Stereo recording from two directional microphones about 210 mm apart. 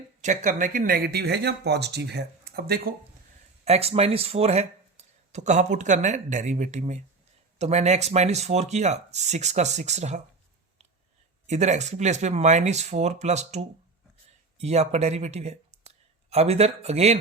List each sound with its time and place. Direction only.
0.2 s speech: 35° right (ahead or behind)
3.6 s speech: 30° right (ahead or behind)
11.4 s speech: 35° right (ahead or behind)